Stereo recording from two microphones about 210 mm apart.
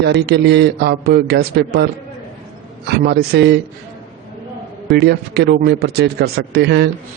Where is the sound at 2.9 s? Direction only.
50° right (ahead or behind).